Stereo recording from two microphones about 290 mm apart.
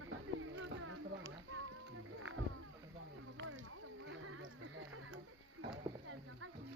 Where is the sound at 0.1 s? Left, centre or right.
Right.